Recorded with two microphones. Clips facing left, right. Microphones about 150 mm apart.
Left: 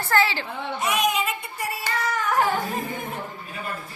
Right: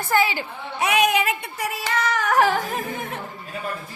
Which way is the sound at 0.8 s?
65° right (ahead or behind).